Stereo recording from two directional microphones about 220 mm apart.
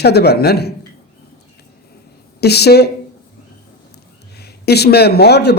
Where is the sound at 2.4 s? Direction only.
45° left (ahead or behind).